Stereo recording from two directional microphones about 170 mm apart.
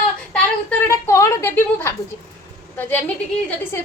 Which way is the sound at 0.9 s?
15° left (ahead or behind).